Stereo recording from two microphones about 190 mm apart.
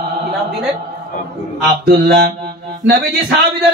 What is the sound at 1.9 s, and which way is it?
Mantra, 55° right (ahead or behind).